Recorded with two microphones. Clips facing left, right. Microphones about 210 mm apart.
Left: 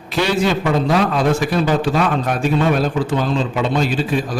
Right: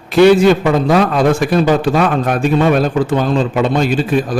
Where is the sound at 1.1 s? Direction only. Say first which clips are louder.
Right 4 dB; 50° right (ahead or behind).